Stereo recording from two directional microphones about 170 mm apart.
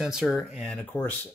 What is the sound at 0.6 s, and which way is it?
Speech, 5° left (ahead or behind).